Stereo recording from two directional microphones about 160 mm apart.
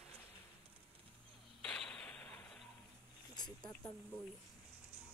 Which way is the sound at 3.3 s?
25° left (ahead or behind).